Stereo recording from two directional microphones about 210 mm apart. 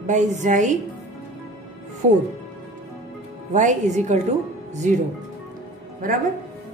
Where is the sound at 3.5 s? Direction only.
35° right (ahead or behind).